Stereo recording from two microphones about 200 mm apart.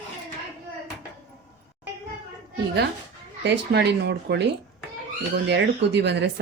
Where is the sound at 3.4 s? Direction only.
55° right (ahead or behind).